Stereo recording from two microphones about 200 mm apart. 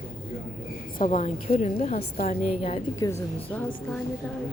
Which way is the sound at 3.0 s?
20° left (ahead or behind).